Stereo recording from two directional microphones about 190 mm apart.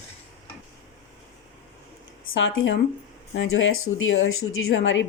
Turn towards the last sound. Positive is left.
turn(degrees=85)